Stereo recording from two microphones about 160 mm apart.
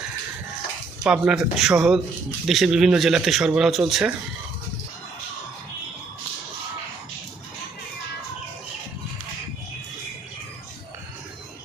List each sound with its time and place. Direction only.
1.0 s speech: 5° right (ahead or behind)